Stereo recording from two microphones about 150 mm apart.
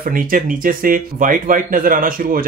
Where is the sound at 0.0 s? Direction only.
65° right (ahead or behind).